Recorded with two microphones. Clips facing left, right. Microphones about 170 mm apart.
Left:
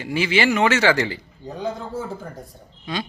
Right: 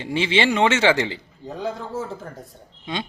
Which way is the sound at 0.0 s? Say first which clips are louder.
Even; 25° right (ahead or behind).